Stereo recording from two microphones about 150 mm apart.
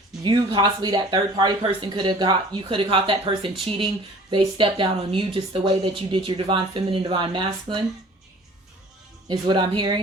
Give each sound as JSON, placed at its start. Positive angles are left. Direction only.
{"t": 0.2, "sound": "speech", "side_deg": -30}
{"t": 9.3, "sound": "speech", "side_deg": -30}